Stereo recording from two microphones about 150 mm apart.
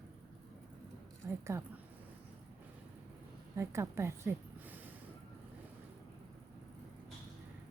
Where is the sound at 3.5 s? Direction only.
20° right (ahead or behind).